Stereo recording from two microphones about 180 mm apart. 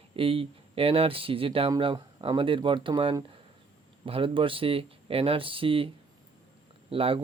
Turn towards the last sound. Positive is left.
turn(degrees=-30)  # may be behind; listen again after turning